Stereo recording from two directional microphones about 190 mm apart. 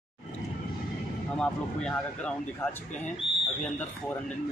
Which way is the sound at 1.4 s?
5° left (ahead or behind).